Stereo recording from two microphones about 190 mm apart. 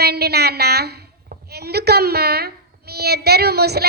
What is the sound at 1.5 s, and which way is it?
A woman's voice, 55° right (ahead or behind).